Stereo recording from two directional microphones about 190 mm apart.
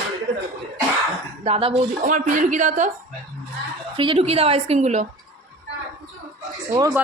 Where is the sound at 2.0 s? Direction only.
40° right (ahead or behind).